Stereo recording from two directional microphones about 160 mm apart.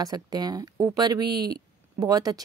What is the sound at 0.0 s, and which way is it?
Speech, 25° right (ahead or behind).